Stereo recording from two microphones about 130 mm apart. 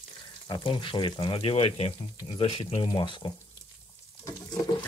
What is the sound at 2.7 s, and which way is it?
Speech, 35° left (ahead or behind).